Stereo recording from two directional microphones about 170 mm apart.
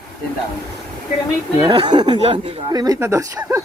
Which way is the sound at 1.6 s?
30° right (ahead or behind).